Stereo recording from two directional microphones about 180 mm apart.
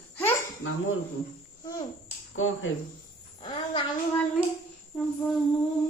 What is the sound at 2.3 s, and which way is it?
Speech, 90° left.